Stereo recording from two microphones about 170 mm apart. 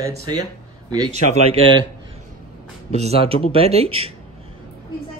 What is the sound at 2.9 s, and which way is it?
Speech, 40° right (ahead or behind).